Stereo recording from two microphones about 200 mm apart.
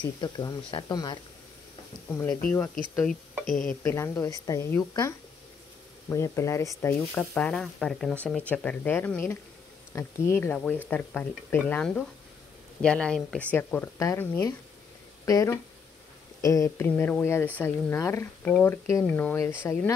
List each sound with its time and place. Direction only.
0.0 s speech: 20° left (ahead or behind)
3.3 s speech: centre (ahead or behind)
3.9 s speech: 15° left (ahead or behind)